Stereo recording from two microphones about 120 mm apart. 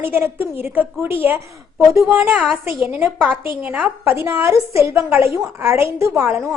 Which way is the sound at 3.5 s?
10° right (ahead or behind).